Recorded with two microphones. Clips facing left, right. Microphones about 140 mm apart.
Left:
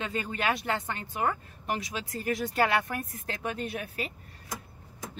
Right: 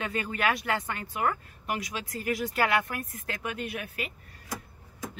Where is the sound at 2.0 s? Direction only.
25° left (ahead or behind).